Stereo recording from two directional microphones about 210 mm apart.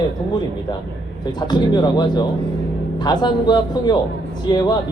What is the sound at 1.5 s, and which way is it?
Speech, 20° left (ahead or behind).